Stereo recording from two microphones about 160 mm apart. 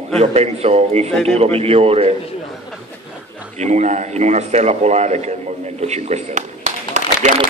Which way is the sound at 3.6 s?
45° right (ahead or behind).